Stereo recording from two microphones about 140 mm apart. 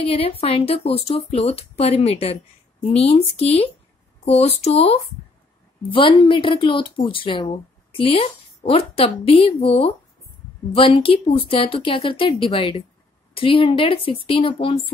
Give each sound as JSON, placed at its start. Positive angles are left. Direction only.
{"t": 0.0, "sound": "speech", "side_deg": 40}